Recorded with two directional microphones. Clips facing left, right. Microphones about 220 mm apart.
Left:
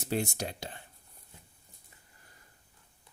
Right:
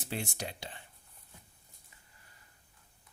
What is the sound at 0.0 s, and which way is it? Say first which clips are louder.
Speech: left 6 dB; 40° left (ahead or behind).